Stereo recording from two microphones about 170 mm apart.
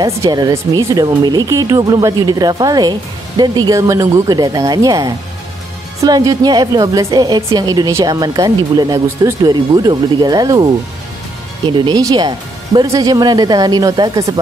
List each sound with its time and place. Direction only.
0.0 s speech: 20° right (ahead or behind)